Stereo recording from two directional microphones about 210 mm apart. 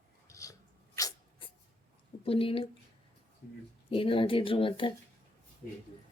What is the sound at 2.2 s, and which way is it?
Speech, 25° left (ahead or behind).